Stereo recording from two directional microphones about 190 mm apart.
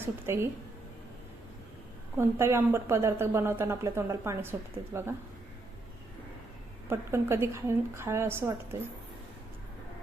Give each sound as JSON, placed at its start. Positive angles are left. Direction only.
{"t": 0.0, "sound": "a woman's voice", "side_deg": -10}
{"t": 2.1, "sound": "a woman's voice", "side_deg": -15}
{"t": 6.8, "sound": "a woman's voice", "side_deg": -15}